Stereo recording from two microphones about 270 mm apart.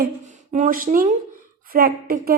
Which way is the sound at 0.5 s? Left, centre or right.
Right.